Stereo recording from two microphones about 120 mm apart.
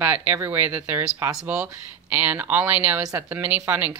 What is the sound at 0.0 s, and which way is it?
Speech, 15° right (ahead or behind).